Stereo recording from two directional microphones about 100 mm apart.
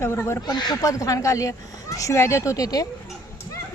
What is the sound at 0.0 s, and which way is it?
Speech, 25° left (ahead or behind).